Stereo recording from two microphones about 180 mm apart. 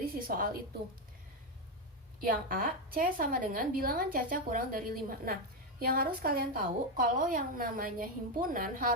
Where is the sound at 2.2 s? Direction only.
50° right (ahead or behind).